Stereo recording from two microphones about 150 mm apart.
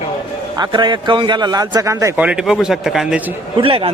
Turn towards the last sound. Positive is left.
turn(degrees=-35)  # may be behind; listen again after turning